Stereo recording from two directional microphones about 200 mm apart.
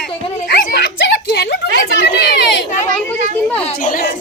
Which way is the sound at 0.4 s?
50° left (ahead or behind).